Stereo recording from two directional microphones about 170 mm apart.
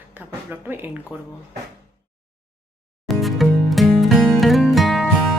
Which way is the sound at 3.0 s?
Centre (ahead or behind).